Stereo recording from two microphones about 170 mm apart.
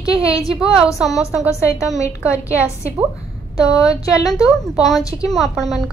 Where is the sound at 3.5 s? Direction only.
20° left (ahead or behind).